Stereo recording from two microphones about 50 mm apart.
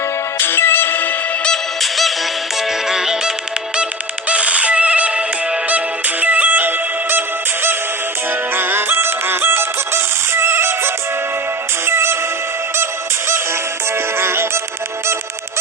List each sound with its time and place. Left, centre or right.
0.3 s music: left
1.8 s music: centre
4.3 s music: right